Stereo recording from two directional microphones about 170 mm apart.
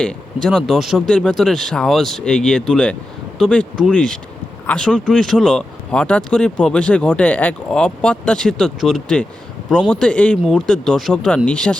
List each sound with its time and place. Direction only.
0.0 s speech: 5° left (ahead or behind)